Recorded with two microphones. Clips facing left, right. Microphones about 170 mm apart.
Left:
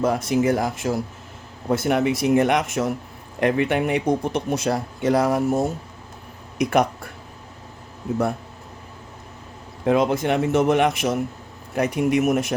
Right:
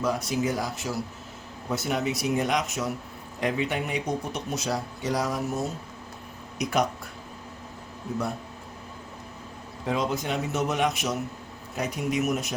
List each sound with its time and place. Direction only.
0.0 s speech: 55° left (ahead or behind)
9.8 s speech: 55° left (ahead or behind)